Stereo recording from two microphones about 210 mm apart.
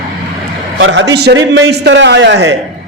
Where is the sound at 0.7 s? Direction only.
60° right (ahead or behind).